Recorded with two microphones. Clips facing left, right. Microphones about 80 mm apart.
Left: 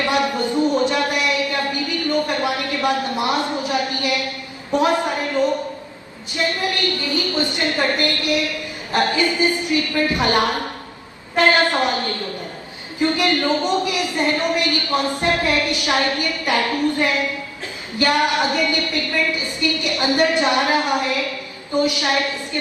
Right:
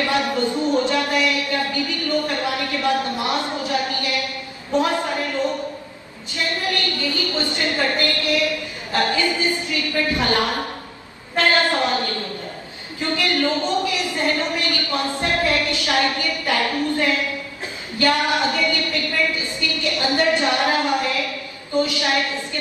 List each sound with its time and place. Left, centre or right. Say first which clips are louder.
0.0 s a sound: left 1 dB; left
4.7 s a woman's voice: left 2 dB; left
13.0 s a woman's voice: left 3 dB; left